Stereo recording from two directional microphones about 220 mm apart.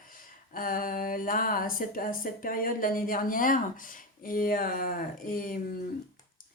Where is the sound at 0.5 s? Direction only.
40° left (ahead or behind).